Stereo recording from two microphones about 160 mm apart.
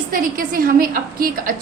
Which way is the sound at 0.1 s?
65° right (ahead or behind).